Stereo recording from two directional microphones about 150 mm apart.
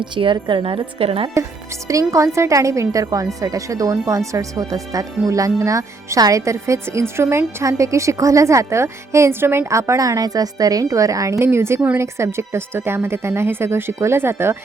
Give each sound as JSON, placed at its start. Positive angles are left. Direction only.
{"t": 0.0, "sound": "a woman's voice", "side_deg": -35}
{"t": 1.9, "sound": "speech", "side_deg": -20}